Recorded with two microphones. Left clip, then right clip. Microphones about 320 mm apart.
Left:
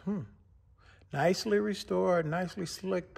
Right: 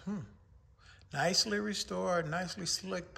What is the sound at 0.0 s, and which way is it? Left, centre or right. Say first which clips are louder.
Speech: left 5 dB; left.